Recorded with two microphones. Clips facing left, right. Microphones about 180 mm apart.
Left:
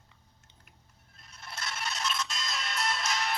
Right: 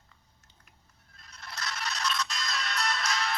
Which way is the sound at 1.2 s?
25° left (ahead or behind).